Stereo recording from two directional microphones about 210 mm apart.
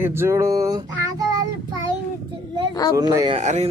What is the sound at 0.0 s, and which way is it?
Child singing, 10° right (ahead or behind).